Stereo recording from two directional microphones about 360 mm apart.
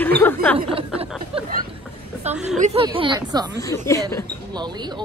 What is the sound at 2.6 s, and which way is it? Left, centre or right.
A man's voice, centre.